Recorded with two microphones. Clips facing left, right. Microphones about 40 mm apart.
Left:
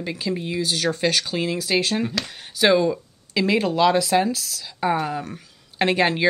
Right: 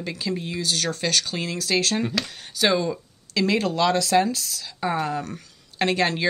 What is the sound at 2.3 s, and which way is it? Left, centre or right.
Speech, centre.